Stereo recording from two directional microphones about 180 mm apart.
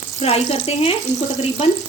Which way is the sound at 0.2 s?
35° left (ahead or behind).